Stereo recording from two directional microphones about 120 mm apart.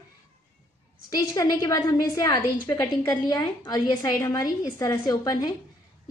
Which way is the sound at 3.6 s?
40° left (ahead or behind).